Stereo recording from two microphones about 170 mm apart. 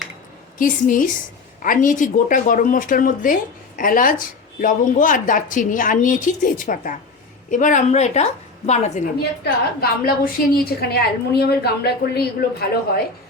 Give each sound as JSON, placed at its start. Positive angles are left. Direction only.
{"t": 0.6, "sound": "a woman's voice", "side_deg": 50}
{"t": 9.4, "sound": "a woman's voice", "side_deg": 65}